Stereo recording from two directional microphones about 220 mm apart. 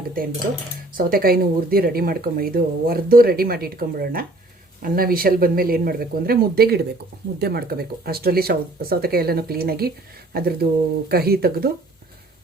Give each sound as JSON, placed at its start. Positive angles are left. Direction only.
{"t": 0.9, "sound": "speech", "side_deg": -40}